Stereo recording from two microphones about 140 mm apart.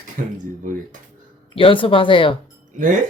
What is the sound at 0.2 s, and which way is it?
Speech, 70° right (ahead or behind).